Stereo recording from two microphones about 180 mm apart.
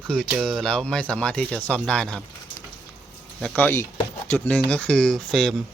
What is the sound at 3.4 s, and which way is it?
Speech, 10° left (ahead or behind).